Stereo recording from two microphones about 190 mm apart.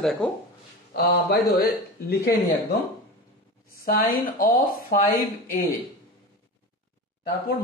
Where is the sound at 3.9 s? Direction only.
50° left (ahead or behind).